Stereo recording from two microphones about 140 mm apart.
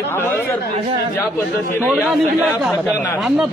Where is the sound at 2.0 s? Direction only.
Centre (ahead or behind).